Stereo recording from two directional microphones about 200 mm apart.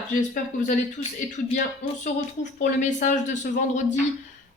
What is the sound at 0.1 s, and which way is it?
Speech, 40° left (ahead or behind).